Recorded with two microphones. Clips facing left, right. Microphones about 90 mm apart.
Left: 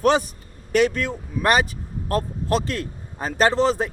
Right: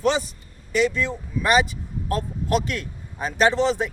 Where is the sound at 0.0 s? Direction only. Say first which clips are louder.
Left 3 dB; 55° left (ahead or behind).